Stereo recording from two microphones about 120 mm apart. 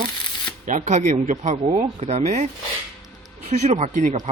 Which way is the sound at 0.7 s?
85° right.